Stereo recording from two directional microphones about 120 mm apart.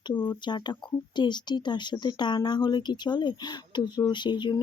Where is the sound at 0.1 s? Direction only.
40° left (ahead or behind).